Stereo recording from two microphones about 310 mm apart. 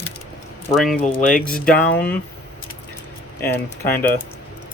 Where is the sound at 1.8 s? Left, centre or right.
Centre.